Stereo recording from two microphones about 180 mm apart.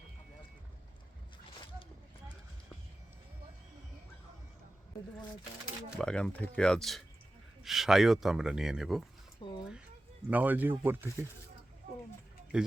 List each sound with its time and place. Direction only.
6.0 s speech: 5° left (ahead or behind)
9.4 s a sound: 30° left (ahead or behind)
10.2 s speech: 10° right (ahead or behind)
12.5 s a man's voice: 5° right (ahead or behind)